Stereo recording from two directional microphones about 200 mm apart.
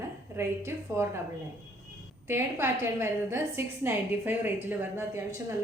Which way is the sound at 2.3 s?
10° right (ahead or behind).